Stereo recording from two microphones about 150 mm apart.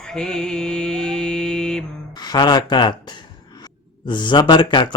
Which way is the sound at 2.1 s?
30° left (ahead or behind).